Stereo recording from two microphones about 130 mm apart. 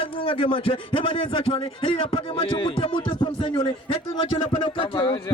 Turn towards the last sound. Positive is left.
turn(degrees=40)  # may be behind; listen again after turning